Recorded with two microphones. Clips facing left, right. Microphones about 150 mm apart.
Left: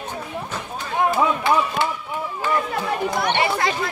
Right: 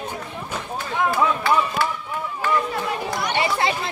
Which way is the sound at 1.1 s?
20° left (ahead or behind).